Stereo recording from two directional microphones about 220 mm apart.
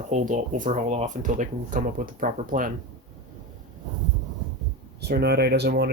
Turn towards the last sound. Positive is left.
turn(degrees=-45)  # may be behind; listen again after turning